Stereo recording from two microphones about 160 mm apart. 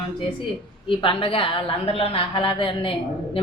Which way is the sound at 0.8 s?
30° left (ahead or behind).